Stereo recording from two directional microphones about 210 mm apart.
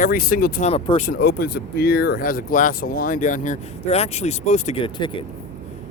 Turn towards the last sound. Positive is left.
turn(degrees=25)  # may be behind; listen again after turning